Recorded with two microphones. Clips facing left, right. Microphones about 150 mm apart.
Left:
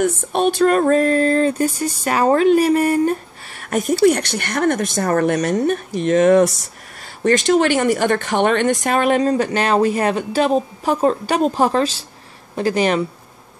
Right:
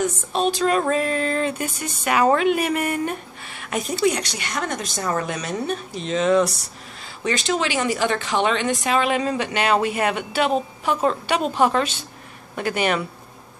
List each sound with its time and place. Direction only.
0.0 s speech: 55° left (ahead or behind); by 3.2 s 35° left (ahead or behind)
3.7 s speech: 50° left (ahead or behind); by 13.0 s 35° left (ahead or behind)